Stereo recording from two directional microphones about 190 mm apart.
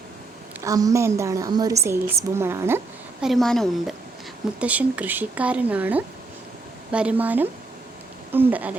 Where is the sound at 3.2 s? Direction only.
Centre (ahead or behind).